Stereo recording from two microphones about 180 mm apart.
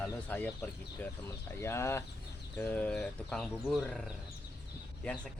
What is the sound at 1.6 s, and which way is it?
Speech, 15° left (ahead or behind).